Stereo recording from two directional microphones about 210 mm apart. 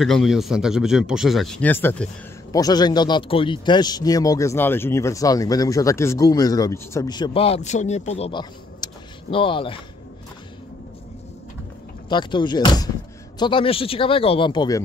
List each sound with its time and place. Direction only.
0.0 s speech: centre (ahead or behind); by 9.8 s 25° left (ahead or behind)
12.1 s speech: 20° left (ahead or behind)